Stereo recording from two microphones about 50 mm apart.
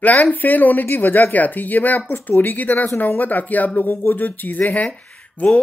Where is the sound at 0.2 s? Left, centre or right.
Left.